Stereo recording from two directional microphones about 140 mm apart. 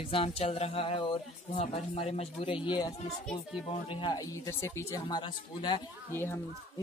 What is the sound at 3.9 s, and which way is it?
Speech, 35° left (ahead or behind).